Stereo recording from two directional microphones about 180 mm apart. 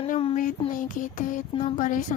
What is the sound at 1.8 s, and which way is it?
Speech, 45° left (ahead or behind).